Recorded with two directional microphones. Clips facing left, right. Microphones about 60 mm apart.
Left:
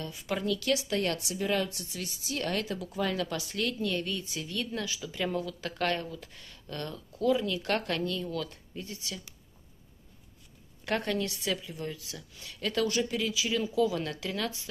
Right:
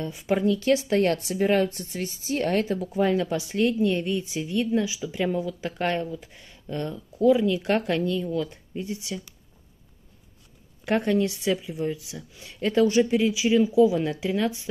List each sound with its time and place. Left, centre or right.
0.0 s a woman's voice: right
10.9 s a woman's voice: centre